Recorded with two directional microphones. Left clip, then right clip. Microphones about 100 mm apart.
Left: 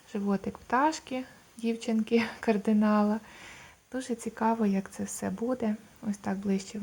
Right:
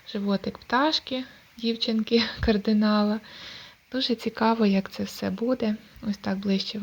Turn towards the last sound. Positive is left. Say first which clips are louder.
# right 5 dB
turn(degrees=-15)  # may be behind; listen again after turning